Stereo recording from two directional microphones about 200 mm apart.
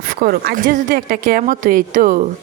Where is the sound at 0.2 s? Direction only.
50° right (ahead or behind).